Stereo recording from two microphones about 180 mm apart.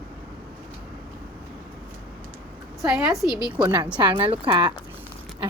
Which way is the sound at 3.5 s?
25° right (ahead or behind).